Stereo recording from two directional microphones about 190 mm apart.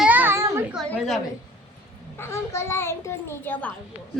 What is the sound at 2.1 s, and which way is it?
A child's voice, 15° left (ahead or behind).